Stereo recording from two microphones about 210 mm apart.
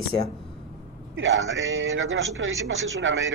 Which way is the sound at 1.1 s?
65° right (ahead or behind).